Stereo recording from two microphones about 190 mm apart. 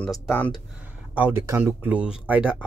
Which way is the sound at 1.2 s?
15° right (ahead or behind).